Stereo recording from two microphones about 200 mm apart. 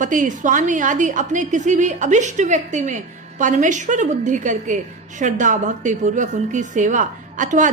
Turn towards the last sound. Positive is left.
turn(degrees=-40)  # may be behind; listen again after turning